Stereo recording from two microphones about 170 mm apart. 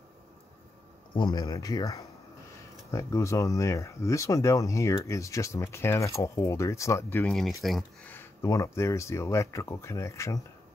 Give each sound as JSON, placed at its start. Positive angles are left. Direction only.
{"t": 1.1, "sound": "speech", "side_deg": 25}
{"t": 7.2, "sound": "speech", "side_deg": 0}
{"t": 8.1, "sound": "speech", "side_deg": 15}